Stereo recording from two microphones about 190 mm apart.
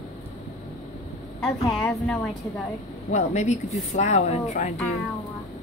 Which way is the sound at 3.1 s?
40° left (ahead or behind).